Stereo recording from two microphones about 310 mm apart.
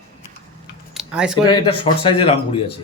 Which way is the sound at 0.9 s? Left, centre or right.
Centre.